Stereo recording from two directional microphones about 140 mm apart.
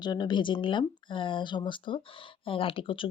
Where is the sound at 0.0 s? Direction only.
30° left (ahead or behind).